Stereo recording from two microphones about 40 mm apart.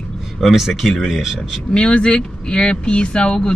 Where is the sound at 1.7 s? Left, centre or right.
Left.